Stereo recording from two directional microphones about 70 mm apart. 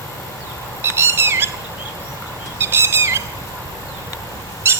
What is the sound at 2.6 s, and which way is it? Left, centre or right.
Bird, right.